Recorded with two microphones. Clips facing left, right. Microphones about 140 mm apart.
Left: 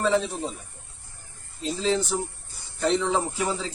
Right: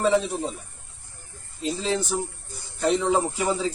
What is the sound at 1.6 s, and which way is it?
Speech, 10° right (ahead or behind).